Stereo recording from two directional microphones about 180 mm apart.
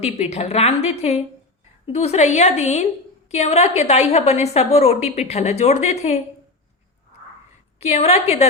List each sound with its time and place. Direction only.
0.0 s a woman's voice: 35° left (ahead or behind)
7.8 s a woman's voice: 35° left (ahead or behind)